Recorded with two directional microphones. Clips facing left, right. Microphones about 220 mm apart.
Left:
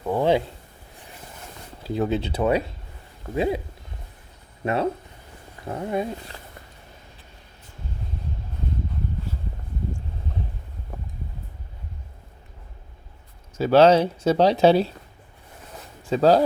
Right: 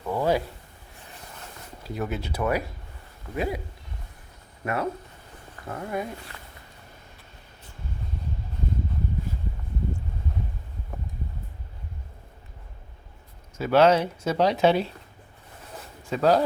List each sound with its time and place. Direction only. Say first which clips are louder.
0.0 s a sound: left 4 dB; 25° left (ahead or behind)
1.8 s speech: left 7 dB; 30° left (ahead or behind)
4.6 s speech: left 4 dB; 25° left (ahead or behind)
13.6 s speech: left 4 dB; 30° left (ahead or behind)
16.0 s speech: left 4 dB; 30° left (ahead or behind)